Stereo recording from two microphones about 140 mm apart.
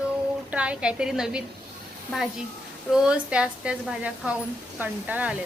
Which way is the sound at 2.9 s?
5° right (ahead or behind).